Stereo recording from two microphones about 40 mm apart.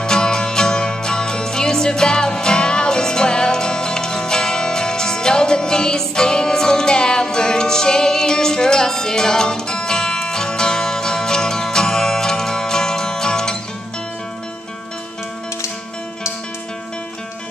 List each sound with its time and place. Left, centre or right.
0.0 s music: centre